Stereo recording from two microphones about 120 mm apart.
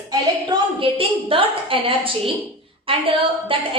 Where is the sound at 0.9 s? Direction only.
50° right (ahead or behind).